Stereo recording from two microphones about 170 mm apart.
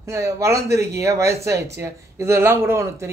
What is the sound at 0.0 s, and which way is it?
Speech, 15° right (ahead or behind).